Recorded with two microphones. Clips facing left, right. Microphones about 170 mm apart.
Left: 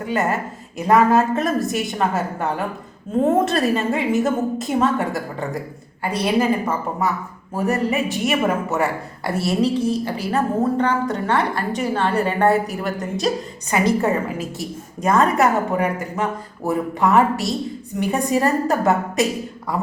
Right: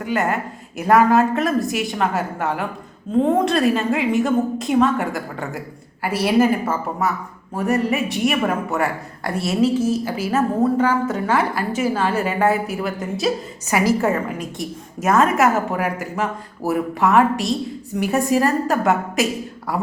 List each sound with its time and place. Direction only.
0.0 s a woman's voice: centre (ahead or behind)